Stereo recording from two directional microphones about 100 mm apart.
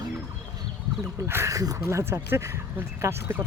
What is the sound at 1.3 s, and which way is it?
Speech, 25° right (ahead or behind).